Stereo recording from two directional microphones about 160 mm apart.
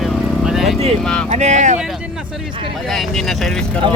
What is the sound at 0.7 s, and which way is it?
Speech, 40° right (ahead or behind).